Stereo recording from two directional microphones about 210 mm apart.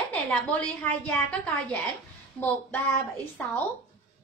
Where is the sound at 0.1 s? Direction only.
5° left (ahead or behind).